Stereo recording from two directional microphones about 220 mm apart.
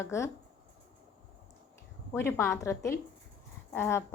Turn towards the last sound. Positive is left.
turn(degrees=10)  # may be behind; listen again after turning